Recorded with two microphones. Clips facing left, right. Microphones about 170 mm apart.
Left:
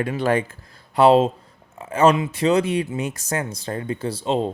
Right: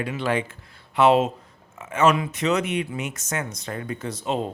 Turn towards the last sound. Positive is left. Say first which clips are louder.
# left 4 dB
turn(degrees=30)  # may be behind; listen again after turning